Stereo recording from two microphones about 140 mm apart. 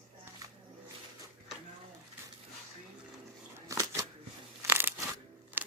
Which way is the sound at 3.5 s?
20° right (ahead or behind).